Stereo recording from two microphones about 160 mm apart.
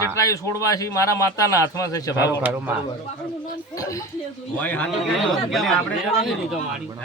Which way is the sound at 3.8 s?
20° left (ahead or behind).